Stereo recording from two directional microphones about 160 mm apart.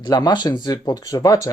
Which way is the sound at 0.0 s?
25° left (ahead or behind).